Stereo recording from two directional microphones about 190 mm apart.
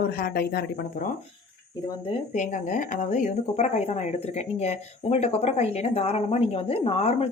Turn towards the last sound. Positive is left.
turn(degrees=30)  # may be behind; listen again after turning